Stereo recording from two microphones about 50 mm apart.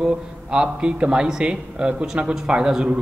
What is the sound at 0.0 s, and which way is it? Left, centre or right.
A man's voice, centre.